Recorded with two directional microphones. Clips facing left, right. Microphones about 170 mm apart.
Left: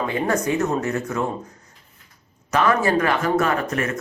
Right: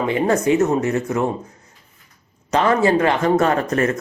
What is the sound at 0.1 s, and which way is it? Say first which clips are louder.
Speech: right 7 dB; 20° right (ahead or behind).